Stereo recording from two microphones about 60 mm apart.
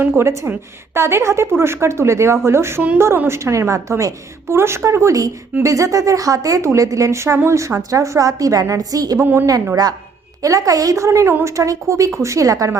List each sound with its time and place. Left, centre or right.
0.0 s a woman's voice: right
1.5 s a woman's voice: right
6.7 s a woman's voice: right
9.1 s a woman's voice: right
10.4 s speech: right